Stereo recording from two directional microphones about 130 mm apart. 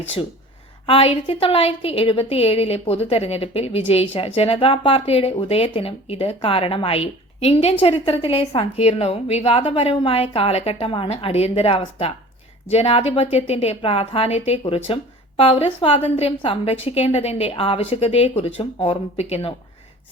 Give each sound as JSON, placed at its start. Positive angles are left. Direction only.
{"t": 0.9, "sound": "a woman's voice", "side_deg": 45}